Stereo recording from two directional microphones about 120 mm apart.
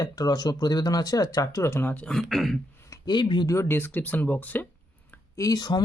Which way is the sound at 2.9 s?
40° left (ahead or behind).